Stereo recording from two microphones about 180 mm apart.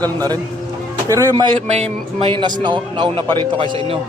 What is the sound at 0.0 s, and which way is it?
A man's voice, 20° right (ahead or behind).